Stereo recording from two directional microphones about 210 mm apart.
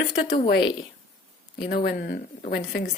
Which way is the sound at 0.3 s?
45° left (ahead or behind).